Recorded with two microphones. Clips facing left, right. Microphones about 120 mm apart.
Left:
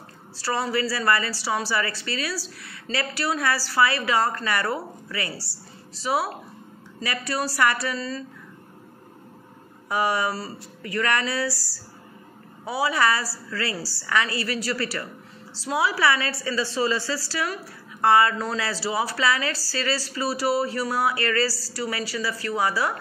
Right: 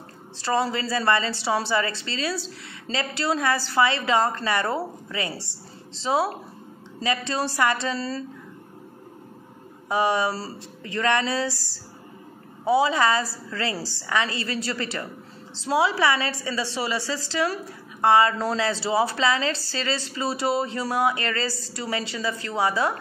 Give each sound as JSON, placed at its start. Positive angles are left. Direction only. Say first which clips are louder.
{"t": 0.4, "sound": "a woman's voice", "louder": "right 1 dB", "side_deg": -25}
{"t": 9.8, "sound": "a woman's voice", "louder": "right 2 dB", "side_deg": -20}